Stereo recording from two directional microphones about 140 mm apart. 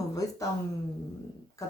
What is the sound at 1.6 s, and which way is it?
Speech, 25° left (ahead or behind).